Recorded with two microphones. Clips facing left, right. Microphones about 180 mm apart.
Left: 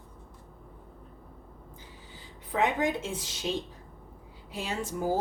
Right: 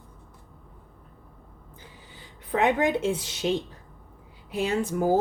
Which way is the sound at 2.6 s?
65° right (ahead or behind).